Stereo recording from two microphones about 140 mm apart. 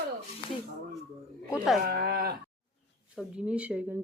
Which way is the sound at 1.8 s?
90° right.